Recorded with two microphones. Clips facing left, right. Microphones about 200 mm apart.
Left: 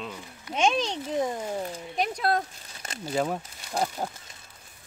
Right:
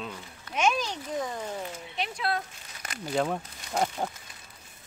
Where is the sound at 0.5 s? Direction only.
25° left (ahead or behind).